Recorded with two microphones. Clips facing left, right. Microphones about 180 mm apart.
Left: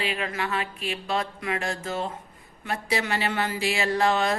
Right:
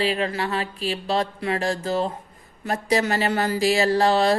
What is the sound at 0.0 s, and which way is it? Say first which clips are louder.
Speech: right 6 dB; 35° right (ahead or behind).